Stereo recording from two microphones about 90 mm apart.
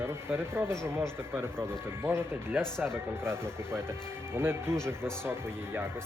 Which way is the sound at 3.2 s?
25° right (ahead or behind).